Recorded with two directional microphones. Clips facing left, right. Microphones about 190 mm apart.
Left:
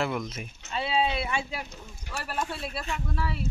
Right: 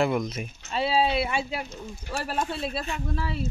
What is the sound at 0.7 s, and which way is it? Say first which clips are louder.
Speech: right 4 dB; 30° right (ahead or behind).